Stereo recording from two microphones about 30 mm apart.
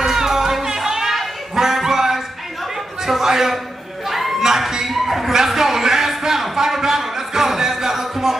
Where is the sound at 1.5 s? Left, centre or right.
Centre.